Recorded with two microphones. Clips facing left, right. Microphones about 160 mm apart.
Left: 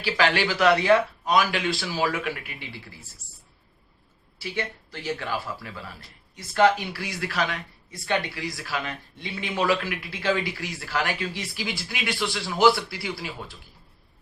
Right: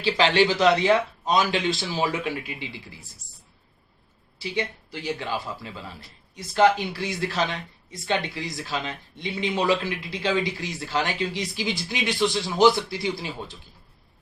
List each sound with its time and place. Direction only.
0.0 s speech: 25° right (ahead or behind)
4.4 s speech: 15° right (ahead or behind)